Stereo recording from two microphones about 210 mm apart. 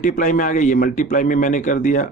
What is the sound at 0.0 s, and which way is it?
A man's voice, 40° left (ahead or behind).